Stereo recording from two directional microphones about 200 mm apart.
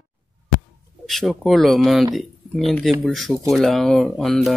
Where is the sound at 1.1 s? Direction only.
Centre (ahead or behind).